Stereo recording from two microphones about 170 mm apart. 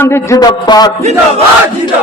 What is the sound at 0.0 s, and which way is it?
Speech, 15° left (ahead or behind).